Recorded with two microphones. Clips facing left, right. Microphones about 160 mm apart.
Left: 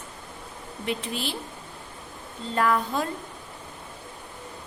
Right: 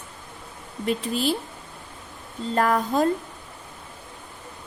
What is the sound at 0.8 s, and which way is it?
Speech, 40° right (ahead or behind).